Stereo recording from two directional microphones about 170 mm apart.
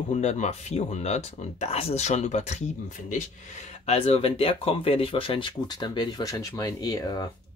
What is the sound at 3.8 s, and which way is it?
Speech, 35° left (ahead or behind).